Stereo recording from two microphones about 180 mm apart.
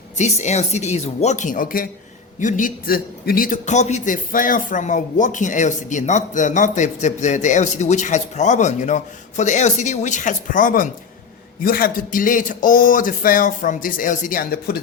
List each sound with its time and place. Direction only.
0.2 s a woman's voice: 40° left (ahead or behind); by 14.8 s 55° left (ahead or behind)